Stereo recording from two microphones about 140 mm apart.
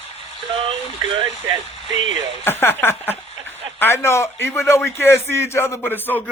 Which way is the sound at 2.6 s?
15° left (ahead or behind).